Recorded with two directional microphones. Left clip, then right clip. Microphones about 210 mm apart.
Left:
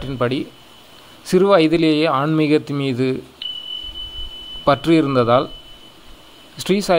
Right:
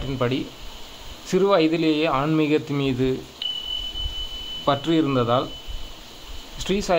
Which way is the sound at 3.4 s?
Centre (ahead or behind).